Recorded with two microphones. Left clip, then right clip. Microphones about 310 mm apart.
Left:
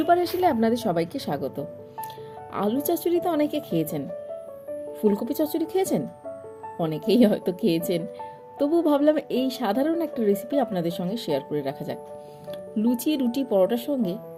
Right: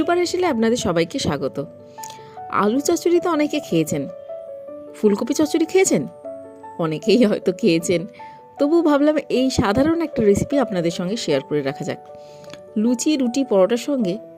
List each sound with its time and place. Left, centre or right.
0.0 s a woman's voice: right